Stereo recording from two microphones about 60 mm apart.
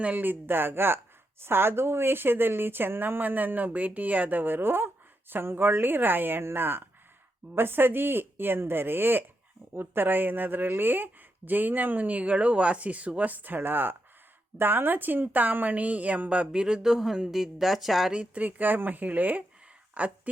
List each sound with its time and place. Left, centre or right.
0.0 s a woman's voice: right; by 18.1 s centre
18.1 s a woman's voice: right